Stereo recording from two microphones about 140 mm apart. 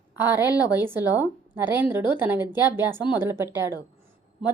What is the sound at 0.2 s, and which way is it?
A woman's voice, 15° right (ahead or behind).